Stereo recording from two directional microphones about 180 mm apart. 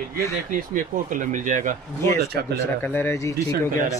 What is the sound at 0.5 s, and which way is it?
Speech, 45° right (ahead or behind).